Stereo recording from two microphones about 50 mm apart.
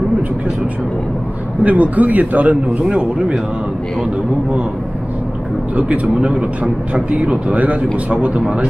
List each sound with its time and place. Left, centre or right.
1.6 s speech: right
5.8 s speech: right